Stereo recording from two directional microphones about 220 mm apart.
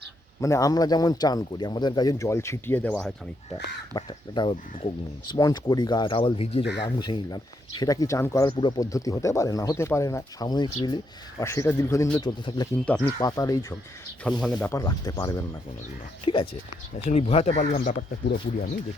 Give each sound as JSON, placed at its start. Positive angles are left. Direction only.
{"t": 0.4, "sound": "speech", "side_deg": 15}
{"t": 3.9, "sound": "speech", "side_deg": 20}
{"t": 14.3, "sound": "speech", "side_deg": 0}
{"t": 17.7, "sound": "speech", "side_deg": 45}